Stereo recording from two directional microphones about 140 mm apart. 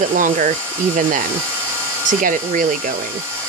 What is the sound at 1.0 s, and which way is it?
Speech, 70° right (ahead or behind).